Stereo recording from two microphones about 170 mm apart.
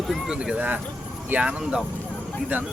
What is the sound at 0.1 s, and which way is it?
Speech, 5° right (ahead or behind).